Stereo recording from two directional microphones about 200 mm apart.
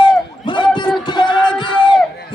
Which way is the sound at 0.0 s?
25° left (ahead or behind).